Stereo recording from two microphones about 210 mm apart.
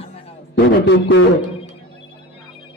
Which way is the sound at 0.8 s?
60° left (ahead or behind).